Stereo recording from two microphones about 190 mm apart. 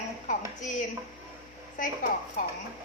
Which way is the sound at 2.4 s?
45° left (ahead or behind).